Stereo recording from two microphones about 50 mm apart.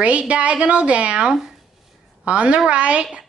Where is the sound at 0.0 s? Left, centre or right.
Right.